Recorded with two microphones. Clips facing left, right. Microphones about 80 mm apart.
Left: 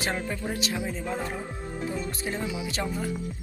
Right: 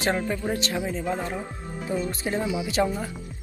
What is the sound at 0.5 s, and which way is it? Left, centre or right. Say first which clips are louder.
Speech: right 3 dB; centre.